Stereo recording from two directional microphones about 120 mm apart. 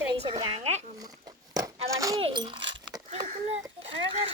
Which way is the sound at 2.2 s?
40° right (ahead or behind).